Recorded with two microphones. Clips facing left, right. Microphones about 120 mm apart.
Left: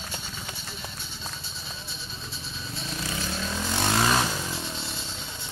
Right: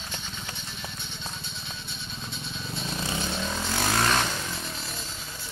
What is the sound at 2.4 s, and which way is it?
Vehicle, centre (ahead or behind).